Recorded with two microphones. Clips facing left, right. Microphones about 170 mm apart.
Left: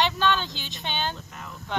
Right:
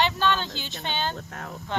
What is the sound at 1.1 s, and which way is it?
Speech, 50° right (ahead or behind).